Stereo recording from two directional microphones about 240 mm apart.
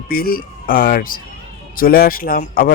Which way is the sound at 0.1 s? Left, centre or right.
Left.